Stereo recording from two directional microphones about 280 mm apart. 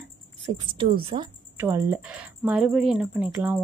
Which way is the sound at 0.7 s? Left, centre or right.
Centre.